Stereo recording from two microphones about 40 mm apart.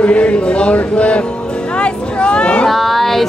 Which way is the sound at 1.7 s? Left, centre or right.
Left.